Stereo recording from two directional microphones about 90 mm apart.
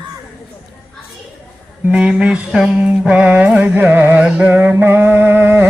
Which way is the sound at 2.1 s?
10° right (ahead or behind).